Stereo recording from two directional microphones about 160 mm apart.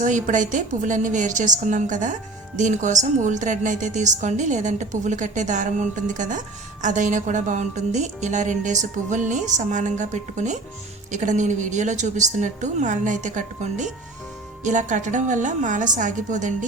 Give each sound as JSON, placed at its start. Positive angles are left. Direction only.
{"t": 0.0, "sound": "speech", "side_deg": -50}